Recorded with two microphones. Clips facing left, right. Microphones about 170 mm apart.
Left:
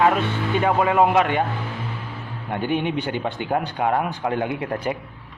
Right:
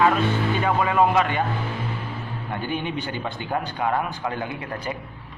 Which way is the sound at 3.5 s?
30° left (ahead or behind).